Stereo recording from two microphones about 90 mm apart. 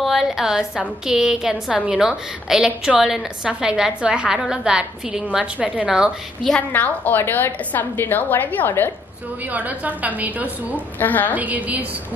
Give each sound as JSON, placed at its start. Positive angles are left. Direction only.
{"t": 0.0, "sound": "a woman's voice", "side_deg": -5}
{"t": 6.7, "sound": "a woman's voice", "side_deg": 20}
{"t": 9.4, "sound": "a woman's voice", "side_deg": -15}
{"t": 11.0, "sound": "a woman's voice", "side_deg": 20}
{"t": 11.3, "sound": "a woman's voice", "side_deg": -15}